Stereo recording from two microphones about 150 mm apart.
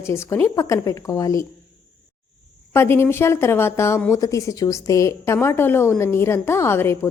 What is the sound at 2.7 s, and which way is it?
Speech, 15° left (ahead or behind).